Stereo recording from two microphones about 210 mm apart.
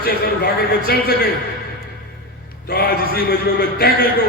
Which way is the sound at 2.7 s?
45° left (ahead or behind).